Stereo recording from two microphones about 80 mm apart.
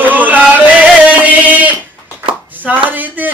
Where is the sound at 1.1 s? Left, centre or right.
Centre.